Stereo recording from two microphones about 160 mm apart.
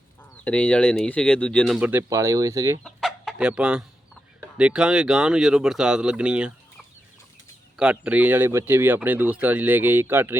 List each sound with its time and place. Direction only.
0.4 s speech: 10° left (ahead or behind)
1.9 s speech: 15° right (ahead or behind)
2.8 s chicken: centre (ahead or behind)
4.4 s speech: 5° right (ahead or behind)
7.8 s speech: 5° right (ahead or behind)